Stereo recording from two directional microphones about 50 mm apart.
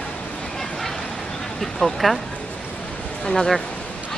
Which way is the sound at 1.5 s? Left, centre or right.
Centre.